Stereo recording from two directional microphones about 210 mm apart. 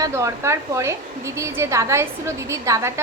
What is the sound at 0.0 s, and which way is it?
A woman's voice, 15° right (ahead or behind).